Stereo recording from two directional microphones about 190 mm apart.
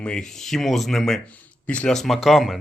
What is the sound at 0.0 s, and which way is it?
Speech, 5° left (ahead or behind).